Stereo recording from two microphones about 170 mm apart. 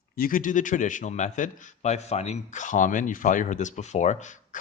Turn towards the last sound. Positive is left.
turn(degrees=45)  # may be behind; listen again after turning